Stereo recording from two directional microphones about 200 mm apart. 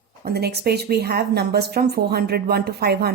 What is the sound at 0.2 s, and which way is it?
Speech, 50° right (ahead or behind).